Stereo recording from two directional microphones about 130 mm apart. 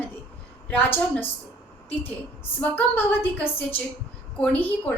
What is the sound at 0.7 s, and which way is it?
A woman's voice, 15° left (ahead or behind).